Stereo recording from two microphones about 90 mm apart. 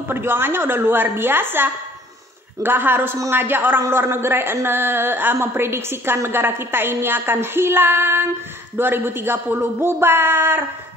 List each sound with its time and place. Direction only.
0.1 s a woman's voice: 25° right (ahead or behind)